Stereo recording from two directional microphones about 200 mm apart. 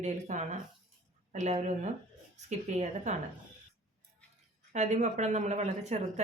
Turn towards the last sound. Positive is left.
turn(degrees=-35)  # may be behind; listen again after turning